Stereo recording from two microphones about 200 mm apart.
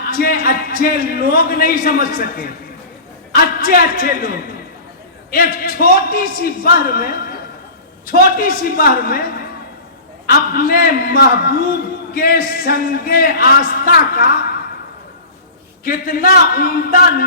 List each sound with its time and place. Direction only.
0.0 s speech: 45° left (ahead or behind)
3.6 s a man's voice: 45° left (ahead or behind)
15.8 s a man's voice: 45° left (ahead or behind)